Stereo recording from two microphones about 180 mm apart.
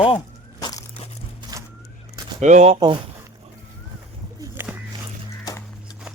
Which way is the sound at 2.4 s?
40° right (ahead or behind).